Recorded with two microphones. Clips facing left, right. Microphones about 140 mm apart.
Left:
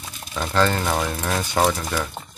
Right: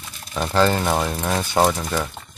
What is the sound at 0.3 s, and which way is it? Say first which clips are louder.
Speech: right 2 dB; 15° right (ahead or behind).